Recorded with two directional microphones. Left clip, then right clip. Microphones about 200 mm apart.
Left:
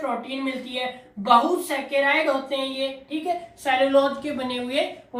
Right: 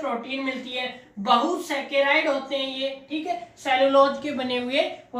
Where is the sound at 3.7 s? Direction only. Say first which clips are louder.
Right 2 dB; 20° right (ahead or behind).